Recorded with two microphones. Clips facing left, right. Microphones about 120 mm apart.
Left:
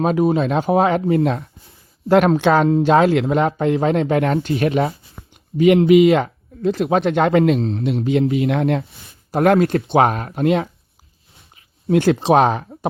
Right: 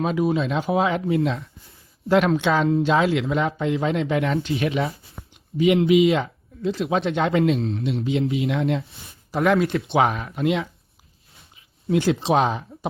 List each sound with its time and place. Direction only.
0.0 s speech: 45° left (ahead or behind)
2.0 s speech: 50° left (ahead or behind)
7.6 s speech: 30° left (ahead or behind)
7.9 s speech: 55° left (ahead or behind)
9.4 s speech: 50° left (ahead or behind)
11.5 s a sound: 55° left (ahead or behind)